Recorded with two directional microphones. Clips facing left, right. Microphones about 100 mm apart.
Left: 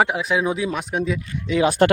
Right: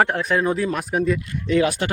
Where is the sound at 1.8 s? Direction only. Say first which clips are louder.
Left 9 dB; 50° left (ahead or behind).